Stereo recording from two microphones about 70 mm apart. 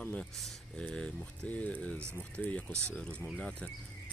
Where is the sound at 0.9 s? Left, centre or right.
Centre.